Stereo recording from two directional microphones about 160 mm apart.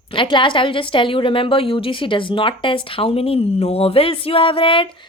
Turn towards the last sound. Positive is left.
turn(degrees=35)  # may be behind; listen again after turning